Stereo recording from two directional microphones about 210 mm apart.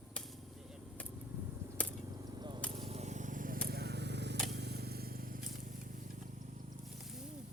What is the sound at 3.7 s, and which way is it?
Vehicle, 50° right (ahead or behind).